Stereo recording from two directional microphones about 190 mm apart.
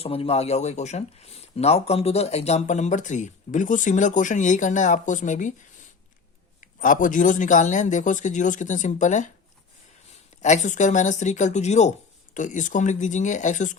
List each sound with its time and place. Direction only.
0.0 s speech: 30° left (ahead or behind)
6.6 s speech: 45° left (ahead or behind)
10.4 s speech: 40° left (ahead or behind)